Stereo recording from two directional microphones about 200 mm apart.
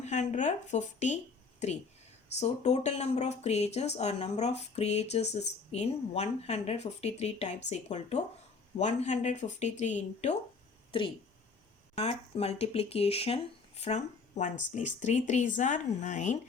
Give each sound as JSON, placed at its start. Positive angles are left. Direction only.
{"t": 0.0, "sound": "speech", "side_deg": 35}